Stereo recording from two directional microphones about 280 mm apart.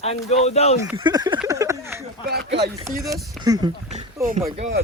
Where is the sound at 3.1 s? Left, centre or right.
Centre.